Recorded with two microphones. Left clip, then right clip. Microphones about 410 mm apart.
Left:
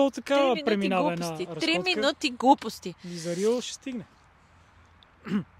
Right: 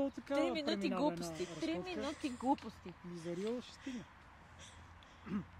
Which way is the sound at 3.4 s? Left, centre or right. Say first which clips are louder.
Left 18 dB; left.